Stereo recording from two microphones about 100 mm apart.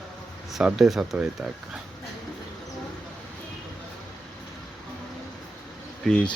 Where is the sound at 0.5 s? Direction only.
Centre (ahead or behind).